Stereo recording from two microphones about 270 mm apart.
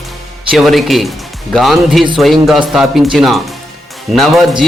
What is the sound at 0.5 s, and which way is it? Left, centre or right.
A man's voice, centre.